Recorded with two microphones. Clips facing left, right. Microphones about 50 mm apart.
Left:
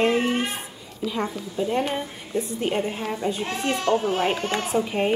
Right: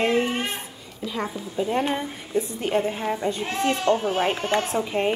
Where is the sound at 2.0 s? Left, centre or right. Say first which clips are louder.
Right 2 dB; centre.